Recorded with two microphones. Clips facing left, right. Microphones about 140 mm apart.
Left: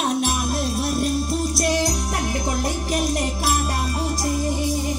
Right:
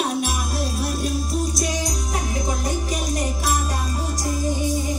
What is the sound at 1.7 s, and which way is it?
Music, 70° left (ahead or behind).